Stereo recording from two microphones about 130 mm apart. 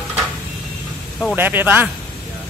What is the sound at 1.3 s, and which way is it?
Speech, 15° right (ahead or behind).